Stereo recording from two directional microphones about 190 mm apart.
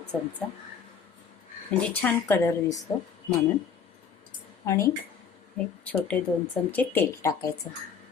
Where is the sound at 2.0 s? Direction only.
10° left (ahead or behind).